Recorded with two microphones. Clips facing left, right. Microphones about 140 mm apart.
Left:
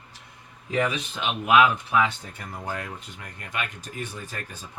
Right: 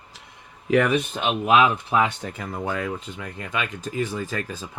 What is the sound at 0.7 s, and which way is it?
Speech, 65° right (ahead or behind).